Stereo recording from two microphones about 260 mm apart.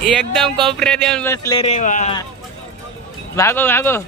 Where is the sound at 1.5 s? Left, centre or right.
Left.